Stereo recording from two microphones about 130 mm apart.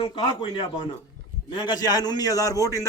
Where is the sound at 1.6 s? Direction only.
30° left (ahead or behind).